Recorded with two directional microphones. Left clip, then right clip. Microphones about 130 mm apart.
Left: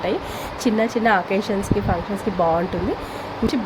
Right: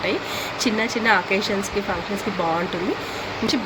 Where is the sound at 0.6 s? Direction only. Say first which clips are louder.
Left 2 dB; 85° left.